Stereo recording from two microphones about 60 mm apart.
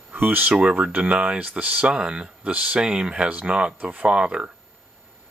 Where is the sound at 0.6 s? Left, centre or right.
Centre.